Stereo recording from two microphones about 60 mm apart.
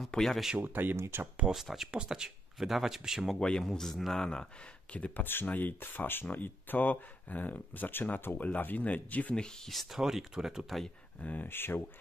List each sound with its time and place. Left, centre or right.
0.0 s speech: centre
0.6 s speech: right
0.9 s speech: right
1.2 s speech: centre
1.5 s speech: centre
3.3 s speech: centre
4.9 s speech: left
5.2 s speech: left
9.4 s speech: centre
11.4 s speech: left